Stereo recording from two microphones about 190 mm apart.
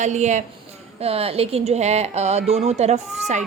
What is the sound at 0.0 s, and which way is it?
A woman's voice, 40° right (ahead or behind).